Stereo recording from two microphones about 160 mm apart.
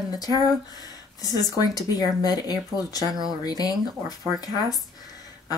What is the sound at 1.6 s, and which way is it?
Speech, 25° left (ahead or behind).